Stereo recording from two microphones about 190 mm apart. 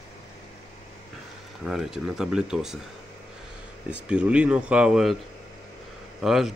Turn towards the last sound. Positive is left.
turn(degrees=0)  # may be behind; listen again after turning